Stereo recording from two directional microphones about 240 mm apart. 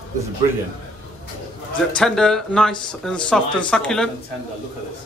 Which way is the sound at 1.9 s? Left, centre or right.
Centre.